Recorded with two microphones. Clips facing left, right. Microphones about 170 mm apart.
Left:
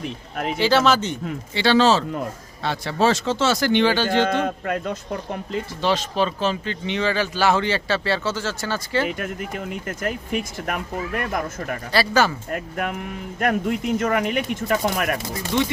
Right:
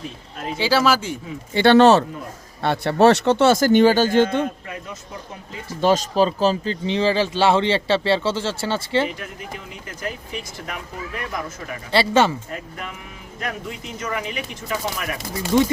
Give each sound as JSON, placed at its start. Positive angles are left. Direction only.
{"t": 0.6, "sound": "speech", "side_deg": -10}
{"t": 1.5, "sound": "speech", "side_deg": -55}
{"t": 4.4, "sound": "speech", "side_deg": 65}
{"t": 5.8, "sound": "speech", "side_deg": -40}
{"t": 9.1, "sound": "speech", "side_deg": 55}
{"t": 11.9, "sound": "speech", "side_deg": -25}
{"t": 12.5, "sound": "speech", "side_deg": 60}